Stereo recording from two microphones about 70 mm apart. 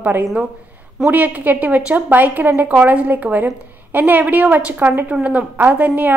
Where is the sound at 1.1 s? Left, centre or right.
Right.